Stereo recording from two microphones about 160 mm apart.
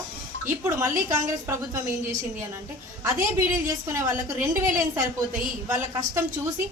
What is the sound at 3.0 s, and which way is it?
A woman's voice, 15° right (ahead or behind).